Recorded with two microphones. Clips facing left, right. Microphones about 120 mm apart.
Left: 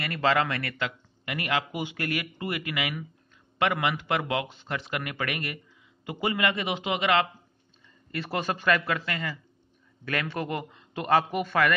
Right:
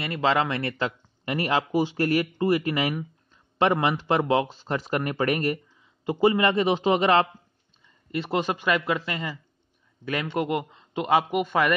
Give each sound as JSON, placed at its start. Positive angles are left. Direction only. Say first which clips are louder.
{"t": 0.0, "sound": "speech", "louder": "right 2 dB", "side_deg": -20}
{"t": 8.1, "sound": "a man's voice", "louder": "right 4 dB", "side_deg": -20}